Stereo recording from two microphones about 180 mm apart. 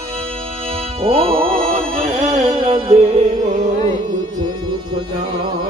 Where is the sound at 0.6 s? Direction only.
30° right (ahead or behind).